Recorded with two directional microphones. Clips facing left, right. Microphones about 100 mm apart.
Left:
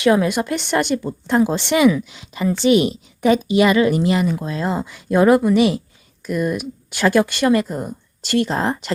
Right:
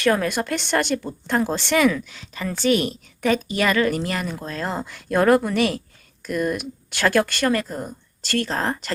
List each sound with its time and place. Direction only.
0.0 s speech: 15° left (ahead or behind)